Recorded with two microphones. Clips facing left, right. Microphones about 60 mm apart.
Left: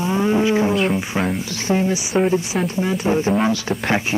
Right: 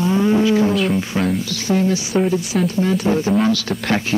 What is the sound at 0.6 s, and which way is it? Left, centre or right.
Music, centre.